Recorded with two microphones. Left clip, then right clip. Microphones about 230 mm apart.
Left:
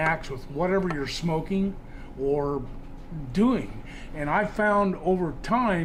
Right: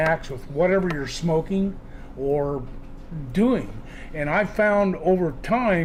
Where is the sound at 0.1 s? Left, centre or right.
Right.